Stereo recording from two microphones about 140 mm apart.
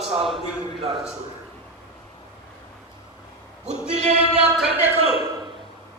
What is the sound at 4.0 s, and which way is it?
Music, 50° right (ahead or behind).